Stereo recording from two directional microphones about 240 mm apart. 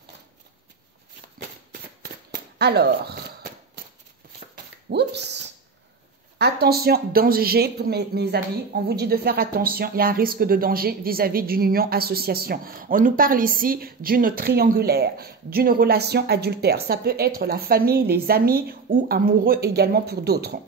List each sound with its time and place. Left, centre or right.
2.3 s a sound: right
4.8 s speech: right
6.3 s speech: right